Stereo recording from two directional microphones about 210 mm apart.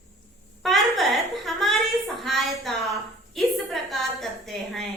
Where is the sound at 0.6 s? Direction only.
Centre (ahead or behind).